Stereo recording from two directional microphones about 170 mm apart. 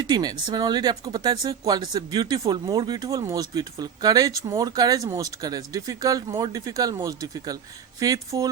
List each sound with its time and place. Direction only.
0.1 s speech: 25° right (ahead or behind)